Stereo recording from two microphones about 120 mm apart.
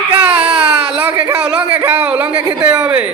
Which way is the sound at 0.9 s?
15° right (ahead or behind).